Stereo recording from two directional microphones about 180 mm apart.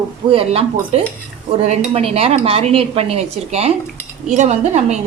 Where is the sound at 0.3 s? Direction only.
30° right (ahead or behind).